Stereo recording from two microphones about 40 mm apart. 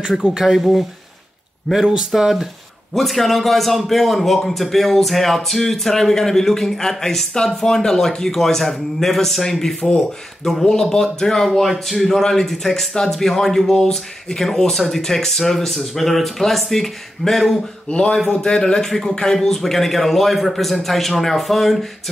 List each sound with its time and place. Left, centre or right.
0.2 s speech: centre
1.7 s speech: centre
2.2 s a man's voice: centre
17.8 s a man's voice: left
18.9 s a man's voice: centre